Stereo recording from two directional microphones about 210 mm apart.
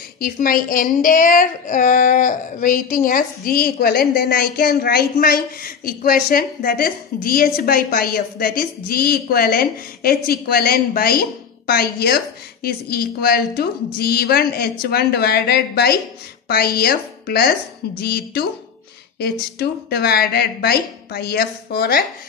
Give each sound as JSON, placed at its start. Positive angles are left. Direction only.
{"t": 0.2, "sound": "a woman's voice", "side_deg": 40}